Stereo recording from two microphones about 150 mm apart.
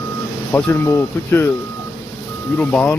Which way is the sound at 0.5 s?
15° left (ahead or behind).